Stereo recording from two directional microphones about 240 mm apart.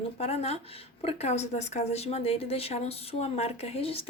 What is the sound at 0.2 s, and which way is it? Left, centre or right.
A woman's voice, left.